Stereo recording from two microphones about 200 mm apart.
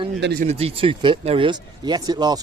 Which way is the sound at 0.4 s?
30° right (ahead or behind).